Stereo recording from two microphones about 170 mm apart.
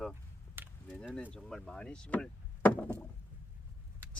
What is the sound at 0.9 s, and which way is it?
Speech, 5° right (ahead or behind).